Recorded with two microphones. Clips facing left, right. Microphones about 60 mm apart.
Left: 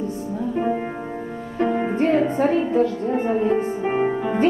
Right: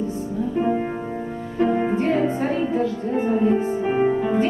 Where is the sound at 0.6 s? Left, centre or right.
Centre.